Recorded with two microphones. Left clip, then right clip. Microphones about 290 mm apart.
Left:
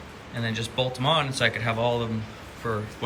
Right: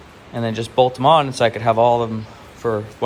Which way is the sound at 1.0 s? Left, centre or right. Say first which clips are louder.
Right 6 dB; centre.